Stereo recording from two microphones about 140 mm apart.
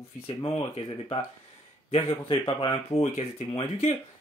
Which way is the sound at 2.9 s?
45° left (ahead or behind).